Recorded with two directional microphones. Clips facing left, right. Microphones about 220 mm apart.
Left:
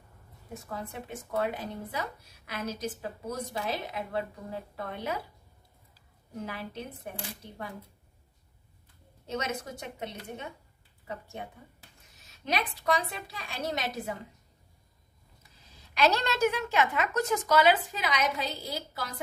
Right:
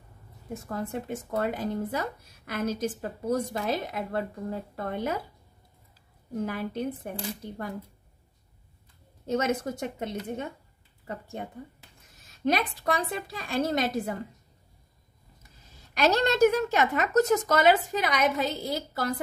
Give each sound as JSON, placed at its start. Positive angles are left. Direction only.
{"t": 0.7, "sound": "speech", "side_deg": -50}
{"t": 6.3, "sound": "speech", "side_deg": -50}
{"t": 9.3, "sound": "speech", "side_deg": -50}
{"t": 12.4, "sound": "speech", "side_deg": -50}
{"t": 15.7, "sound": "speech", "side_deg": -45}